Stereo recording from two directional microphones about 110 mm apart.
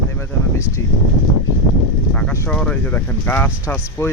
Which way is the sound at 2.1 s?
10° left (ahead or behind).